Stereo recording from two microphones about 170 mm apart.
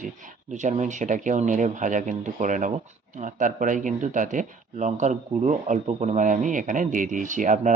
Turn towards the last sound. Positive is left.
turn(degrees=-50)  # may be behind; listen again after turning